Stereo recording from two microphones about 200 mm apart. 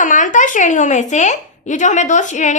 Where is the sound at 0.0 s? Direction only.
40° left (ahead or behind).